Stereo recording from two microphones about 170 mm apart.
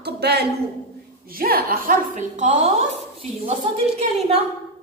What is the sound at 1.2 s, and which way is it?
A woman's voice, 60° right (ahead or behind).